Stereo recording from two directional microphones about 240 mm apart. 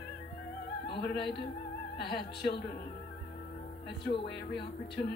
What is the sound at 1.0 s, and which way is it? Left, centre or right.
A woman's voice, left.